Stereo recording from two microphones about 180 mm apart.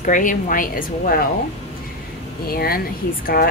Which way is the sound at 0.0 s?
45° left (ahead or behind).